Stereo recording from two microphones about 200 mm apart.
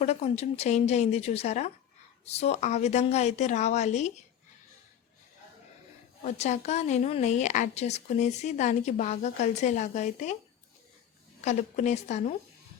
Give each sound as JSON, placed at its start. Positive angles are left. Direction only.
{"t": 0.0, "sound": "speech", "side_deg": 30}
{"t": 6.2, "sound": "speech", "side_deg": 35}
{"t": 11.3, "sound": "speech", "side_deg": 35}